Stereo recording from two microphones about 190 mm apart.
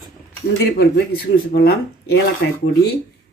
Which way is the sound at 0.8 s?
50° left (ahead or behind).